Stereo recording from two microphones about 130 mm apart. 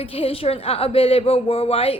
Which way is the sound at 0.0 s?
45° left (ahead or behind).